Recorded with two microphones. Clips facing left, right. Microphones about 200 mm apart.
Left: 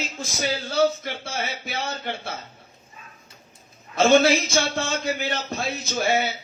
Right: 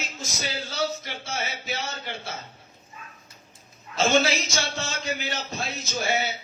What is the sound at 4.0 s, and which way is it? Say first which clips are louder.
A man's voice: left 5 dB; 55° left (ahead or behind).